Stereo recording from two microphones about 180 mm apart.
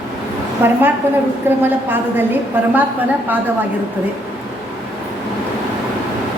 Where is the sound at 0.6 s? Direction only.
10° right (ahead or behind).